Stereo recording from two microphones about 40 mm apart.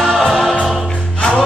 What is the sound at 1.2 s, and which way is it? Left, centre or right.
Music, centre.